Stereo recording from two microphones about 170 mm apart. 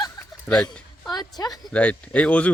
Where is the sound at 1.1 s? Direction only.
25° left (ahead or behind).